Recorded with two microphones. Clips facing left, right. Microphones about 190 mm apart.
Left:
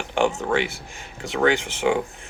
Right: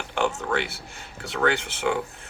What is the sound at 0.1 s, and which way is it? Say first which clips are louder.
Speech: left 4 dB; 15° left (ahead or behind).